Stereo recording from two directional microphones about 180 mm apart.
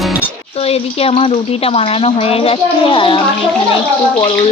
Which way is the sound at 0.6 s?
35° left (ahead or behind).